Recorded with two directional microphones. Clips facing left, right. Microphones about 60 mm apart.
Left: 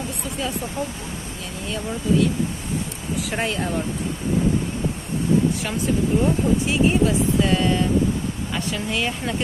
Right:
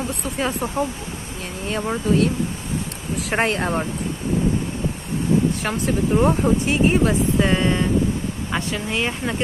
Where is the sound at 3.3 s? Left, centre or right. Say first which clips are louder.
Right 5 dB; right.